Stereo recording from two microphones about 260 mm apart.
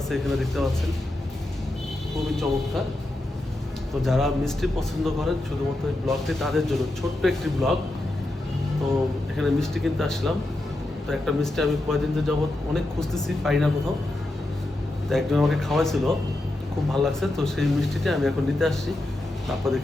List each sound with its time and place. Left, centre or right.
0.1 s speech: centre
2.1 s speech: centre
4.0 s speech: centre
9.4 s speech: centre
15.1 s speech: centre